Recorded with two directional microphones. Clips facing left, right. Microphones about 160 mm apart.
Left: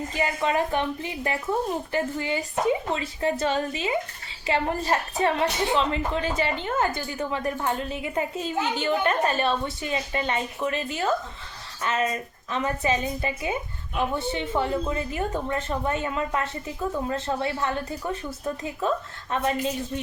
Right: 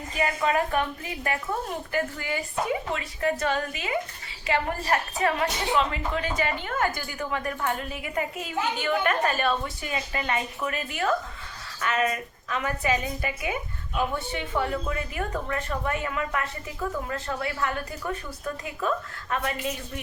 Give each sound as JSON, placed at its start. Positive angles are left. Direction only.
{"t": 0.2, "sound": "a woman's voice", "side_deg": 25}